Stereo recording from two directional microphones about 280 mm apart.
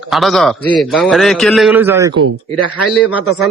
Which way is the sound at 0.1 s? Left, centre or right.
Centre.